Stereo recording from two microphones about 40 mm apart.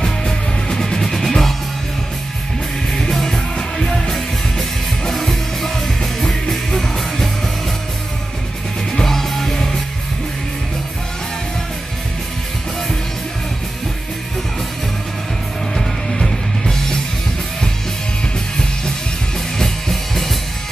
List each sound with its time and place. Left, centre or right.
0.0 s music: centre
2.9 s music: centre
4.1 s music: centre
8.9 s music: centre
15.7 s music: centre
19.6 s music: centre